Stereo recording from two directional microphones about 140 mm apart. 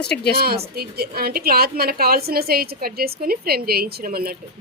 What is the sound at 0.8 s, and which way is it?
A woman's voice, 90° right.